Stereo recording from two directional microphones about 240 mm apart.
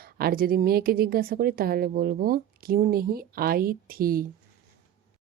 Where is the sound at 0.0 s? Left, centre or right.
Right.